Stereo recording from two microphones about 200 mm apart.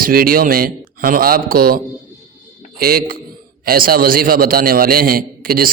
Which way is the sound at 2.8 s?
45° right (ahead or behind).